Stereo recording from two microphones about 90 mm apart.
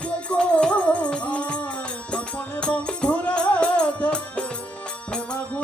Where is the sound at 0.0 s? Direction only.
15° left (ahead or behind).